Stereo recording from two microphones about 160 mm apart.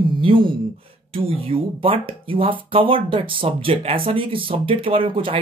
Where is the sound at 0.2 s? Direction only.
35° right (ahead or behind).